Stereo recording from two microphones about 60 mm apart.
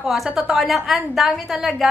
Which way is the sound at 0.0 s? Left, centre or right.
Centre.